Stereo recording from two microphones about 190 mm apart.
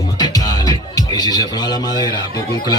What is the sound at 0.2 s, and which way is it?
Music, 20° left (ahead or behind).